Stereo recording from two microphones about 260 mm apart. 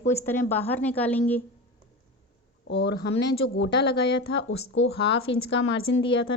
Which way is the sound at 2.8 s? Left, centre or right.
Left.